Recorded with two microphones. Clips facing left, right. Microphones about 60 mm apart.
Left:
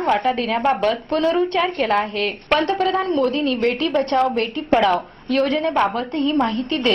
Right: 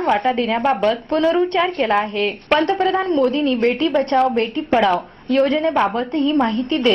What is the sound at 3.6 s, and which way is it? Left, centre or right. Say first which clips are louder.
A woman's voice: right 2 dB; right.